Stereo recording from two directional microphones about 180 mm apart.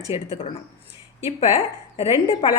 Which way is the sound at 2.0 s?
30° left (ahead or behind).